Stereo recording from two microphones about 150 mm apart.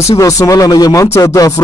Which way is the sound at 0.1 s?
20° left (ahead or behind).